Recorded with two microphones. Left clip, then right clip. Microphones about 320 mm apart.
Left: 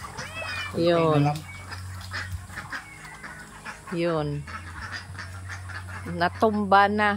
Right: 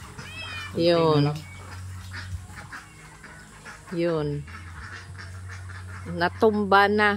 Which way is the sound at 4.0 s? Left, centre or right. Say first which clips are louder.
Right 1 dB; centre.